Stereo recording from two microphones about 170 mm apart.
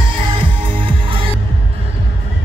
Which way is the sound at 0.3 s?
30° right (ahead or behind).